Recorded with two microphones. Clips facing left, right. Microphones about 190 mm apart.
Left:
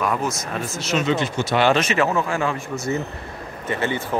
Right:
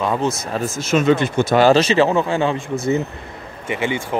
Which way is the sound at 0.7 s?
50° right (ahead or behind).